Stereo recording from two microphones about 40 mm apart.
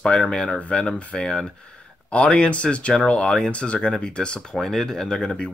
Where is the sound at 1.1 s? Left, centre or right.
Centre.